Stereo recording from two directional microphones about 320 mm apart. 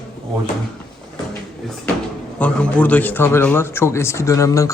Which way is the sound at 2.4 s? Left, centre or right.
Centre.